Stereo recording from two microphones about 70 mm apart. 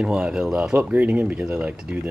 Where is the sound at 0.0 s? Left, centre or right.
Centre.